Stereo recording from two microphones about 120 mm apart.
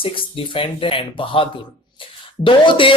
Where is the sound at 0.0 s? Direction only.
45° left (ahead or behind).